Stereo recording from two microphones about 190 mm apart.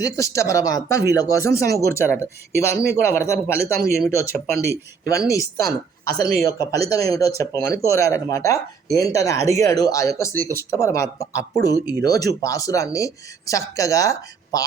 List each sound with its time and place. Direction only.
0.0 s speech: 15° left (ahead or behind)